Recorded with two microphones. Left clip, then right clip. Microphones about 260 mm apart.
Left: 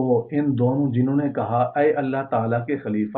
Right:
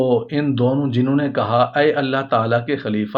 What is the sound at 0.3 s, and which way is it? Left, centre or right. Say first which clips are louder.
Speech: right 3 dB; right.